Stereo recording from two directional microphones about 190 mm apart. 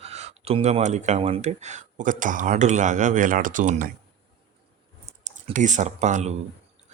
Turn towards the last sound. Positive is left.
turn(degrees=-35)  # may be behind; listen again after turning